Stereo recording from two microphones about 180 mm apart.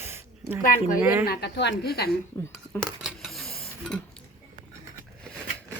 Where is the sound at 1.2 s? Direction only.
60° left (ahead or behind).